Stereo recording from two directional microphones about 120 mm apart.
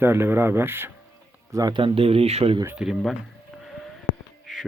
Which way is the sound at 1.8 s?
50° right (ahead or behind).